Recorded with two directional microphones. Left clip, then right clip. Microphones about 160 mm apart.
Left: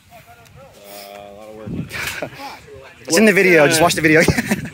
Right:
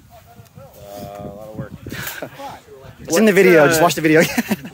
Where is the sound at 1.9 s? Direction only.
15° left (ahead or behind).